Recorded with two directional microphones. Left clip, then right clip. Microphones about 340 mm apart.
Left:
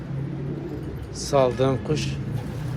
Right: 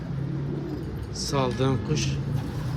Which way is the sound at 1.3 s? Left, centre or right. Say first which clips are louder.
Left 6 dB; centre.